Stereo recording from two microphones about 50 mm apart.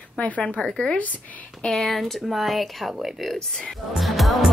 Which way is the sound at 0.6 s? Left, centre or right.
Centre.